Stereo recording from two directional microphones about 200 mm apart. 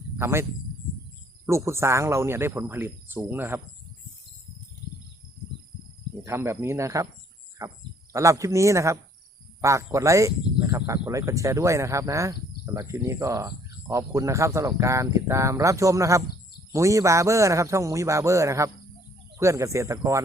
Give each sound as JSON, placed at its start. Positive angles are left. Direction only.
{"t": 0.2, "sound": "speech", "side_deg": -10}
{"t": 1.5, "sound": "speech", "side_deg": -15}
{"t": 6.2, "sound": "speech", "side_deg": -15}